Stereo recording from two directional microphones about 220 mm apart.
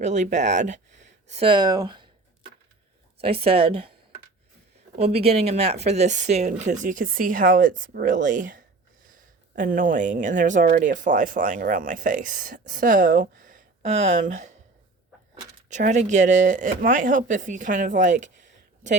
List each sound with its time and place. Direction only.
0.0 s speech: 35° right (ahead or behind)
3.2 s a woman's voice: 25° right (ahead or behind)
4.9 s speech: 30° right (ahead or behind)
15.7 s speech: 35° right (ahead or behind)